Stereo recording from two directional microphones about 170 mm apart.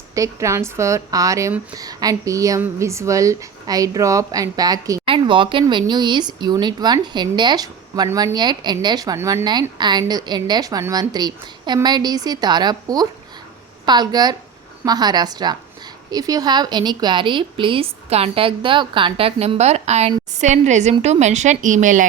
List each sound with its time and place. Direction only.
0.1 s a woman's voice: 20° right (ahead or behind); by 22.0 s 50° right (ahead or behind)